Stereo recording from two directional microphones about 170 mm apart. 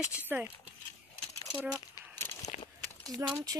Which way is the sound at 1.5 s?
5° right (ahead or behind).